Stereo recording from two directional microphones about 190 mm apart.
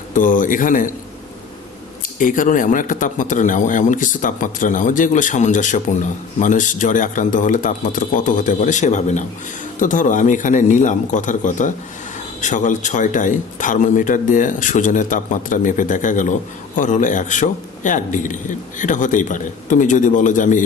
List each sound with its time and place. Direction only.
0.1 s a man's voice: 45° left (ahead or behind)
2.1 s a man's voice: 45° left (ahead or behind)